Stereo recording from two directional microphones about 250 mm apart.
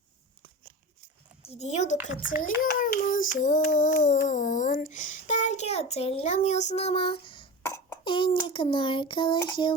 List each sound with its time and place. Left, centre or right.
1.4 s a woman's voice: left
2.4 s child singing: left
7.6 s cough: centre
8.4 s child singing: centre